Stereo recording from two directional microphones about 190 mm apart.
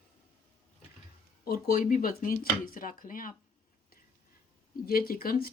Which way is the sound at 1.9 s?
45° left (ahead or behind).